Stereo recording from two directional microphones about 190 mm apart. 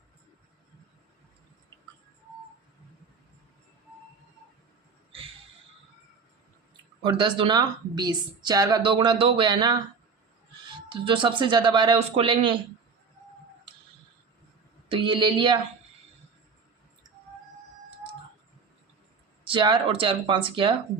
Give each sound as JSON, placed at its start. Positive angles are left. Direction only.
{"t": 7.0, "sound": "a woman's voice", "side_deg": -25}
{"t": 14.8, "sound": "a woman's voice", "side_deg": -25}
{"t": 19.5, "sound": "a woman's voice", "side_deg": -25}